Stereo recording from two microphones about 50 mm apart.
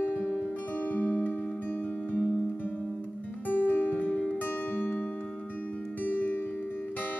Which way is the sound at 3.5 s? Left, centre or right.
Left.